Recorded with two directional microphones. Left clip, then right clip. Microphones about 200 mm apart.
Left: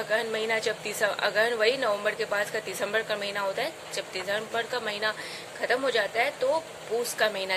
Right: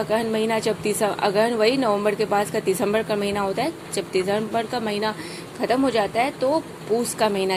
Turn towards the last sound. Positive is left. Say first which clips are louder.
# right 5 dB
turn(degrees=-20)  # may be behind; listen again after turning